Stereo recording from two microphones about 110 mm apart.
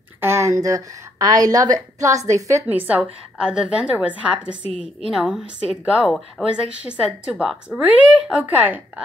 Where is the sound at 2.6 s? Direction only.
15° right (ahead or behind).